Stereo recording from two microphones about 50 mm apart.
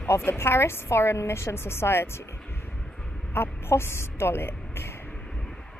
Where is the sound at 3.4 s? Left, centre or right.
Left.